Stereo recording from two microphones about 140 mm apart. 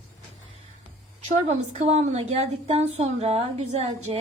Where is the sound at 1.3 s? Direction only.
50° right (ahead or behind).